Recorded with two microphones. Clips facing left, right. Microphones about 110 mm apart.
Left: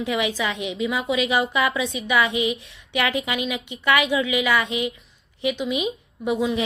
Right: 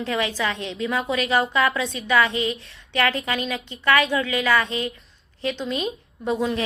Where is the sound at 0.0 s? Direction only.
15° left (ahead or behind).